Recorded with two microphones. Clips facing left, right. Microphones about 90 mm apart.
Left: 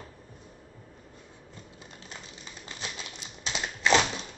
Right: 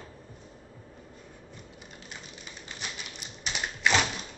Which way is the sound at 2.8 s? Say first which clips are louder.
Left 1 dB; 25° left (ahead or behind).